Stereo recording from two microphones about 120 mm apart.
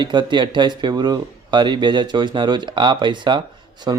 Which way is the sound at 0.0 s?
40° right (ahead or behind).